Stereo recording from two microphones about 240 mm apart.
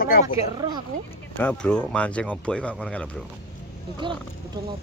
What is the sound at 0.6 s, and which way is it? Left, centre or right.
Speech, centre.